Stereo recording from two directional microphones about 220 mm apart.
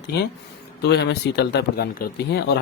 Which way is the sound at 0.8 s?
50° left (ahead or behind).